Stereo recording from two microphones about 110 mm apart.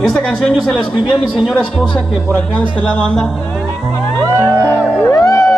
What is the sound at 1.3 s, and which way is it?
Speech, 5° right (ahead or behind).